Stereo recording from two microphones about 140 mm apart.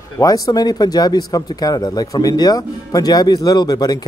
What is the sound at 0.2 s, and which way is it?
Speech, 25° left (ahead or behind).